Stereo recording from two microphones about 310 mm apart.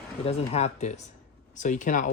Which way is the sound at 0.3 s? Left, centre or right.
Left.